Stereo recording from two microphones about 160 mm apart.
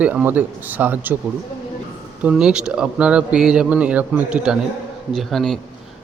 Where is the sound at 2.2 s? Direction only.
5° right (ahead or behind).